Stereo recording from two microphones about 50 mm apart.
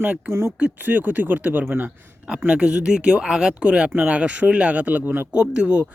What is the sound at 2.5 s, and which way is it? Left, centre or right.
Speech, centre.